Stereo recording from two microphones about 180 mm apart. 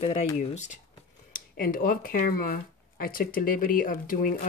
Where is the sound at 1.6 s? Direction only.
50° left (ahead or behind).